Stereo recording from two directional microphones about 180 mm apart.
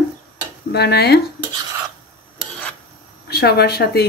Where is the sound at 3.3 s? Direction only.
65° left (ahead or behind).